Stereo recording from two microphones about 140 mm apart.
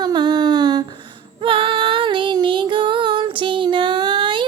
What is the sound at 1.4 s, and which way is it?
Female singing, 40° right (ahead or behind).